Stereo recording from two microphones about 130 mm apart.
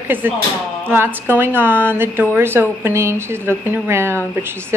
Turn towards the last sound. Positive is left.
turn(degrees=-20)  # may be behind; listen again after turning